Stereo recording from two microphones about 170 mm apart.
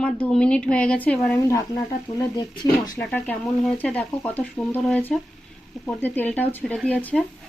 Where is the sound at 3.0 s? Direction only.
10° left (ahead or behind).